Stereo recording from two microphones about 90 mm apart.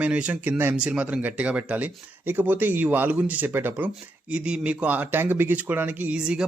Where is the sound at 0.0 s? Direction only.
15° right (ahead or behind).